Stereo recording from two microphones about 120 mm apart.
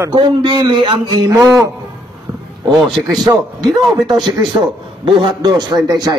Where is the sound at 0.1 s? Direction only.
40° right (ahead or behind).